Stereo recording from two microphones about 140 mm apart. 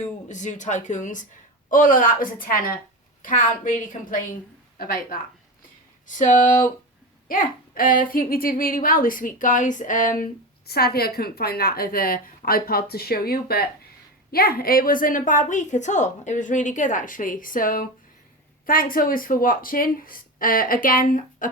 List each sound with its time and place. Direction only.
0.3 s speech: 60° left (ahead or behind); by 2.7 s 90° left
3.2 s a woman's voice: 70° left (ahead or behind)
4.8 s speech: 90° left
6.1 s speech: 65° left (ahead or behind)
7.3 s a woman's voice: 80° left
18.6 s speech: 90° left; by 21.5 s 70° left (ahead or behind)